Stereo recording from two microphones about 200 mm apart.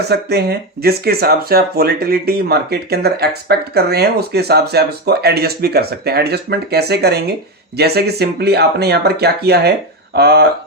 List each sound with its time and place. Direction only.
0.0 s speech: 55° right (ahead or behind)